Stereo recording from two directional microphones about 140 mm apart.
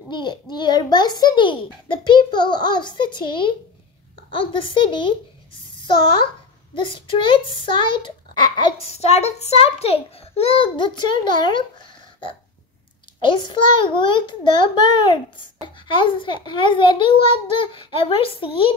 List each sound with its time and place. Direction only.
0.1 s a child's voice: 30° left (ahead or behind)
6.7 s a child's voice: 35° left (ahead or behind)
8.9 s a child's voice: 50° left (ahead or behind); by 11.6 s 35° left (ahead or behind)
13.2 s a child's voice: 35° left (ahead or behind)